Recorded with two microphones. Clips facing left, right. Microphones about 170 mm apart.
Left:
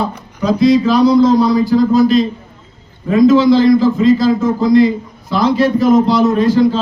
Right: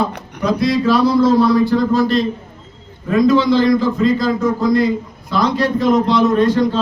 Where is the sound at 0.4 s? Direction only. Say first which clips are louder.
Left 4 dB; centre (ahead or behind).